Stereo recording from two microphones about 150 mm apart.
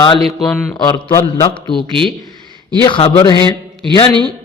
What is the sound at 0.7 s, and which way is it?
A man's voice, 25° left (ahead or behind).